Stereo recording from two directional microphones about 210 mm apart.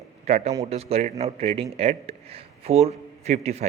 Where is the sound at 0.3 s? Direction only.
35° right (ahead or behind).